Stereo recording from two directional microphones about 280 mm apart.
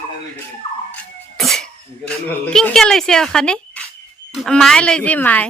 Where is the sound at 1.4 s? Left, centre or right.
Centre.